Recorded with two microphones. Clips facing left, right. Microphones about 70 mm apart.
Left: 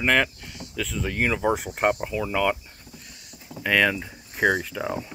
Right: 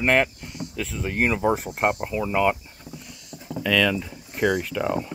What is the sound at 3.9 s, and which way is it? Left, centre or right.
Speech, left.